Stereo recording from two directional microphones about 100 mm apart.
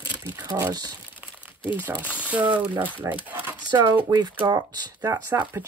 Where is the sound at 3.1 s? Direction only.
20° right (ahead or behind).